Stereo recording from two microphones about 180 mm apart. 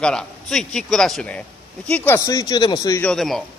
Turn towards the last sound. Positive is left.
turn(degrees=0)  # may be behind; listen again after turning